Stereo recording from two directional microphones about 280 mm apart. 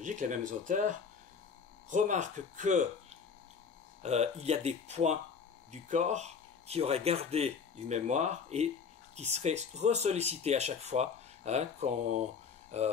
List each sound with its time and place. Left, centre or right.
0.0 s speech: right